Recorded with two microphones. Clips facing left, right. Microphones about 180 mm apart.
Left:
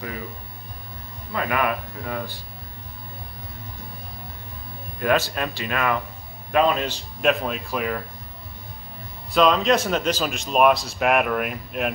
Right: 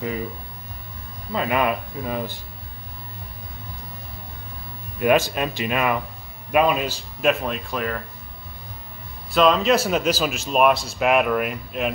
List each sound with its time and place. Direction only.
1.3 s speech: 20° right (ahead or behind)
5.0 s speech: 15° right (ahead or behind); by 8.0 s 5° left (ahead or behind)
9.3 s speech: centre (ahead or behind)